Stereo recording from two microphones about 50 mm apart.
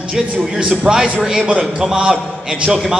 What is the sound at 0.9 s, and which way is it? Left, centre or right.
A man's voice, centre.